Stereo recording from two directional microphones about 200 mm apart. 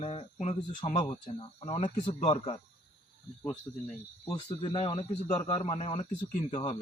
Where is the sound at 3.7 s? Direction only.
20° left (ahead or behind).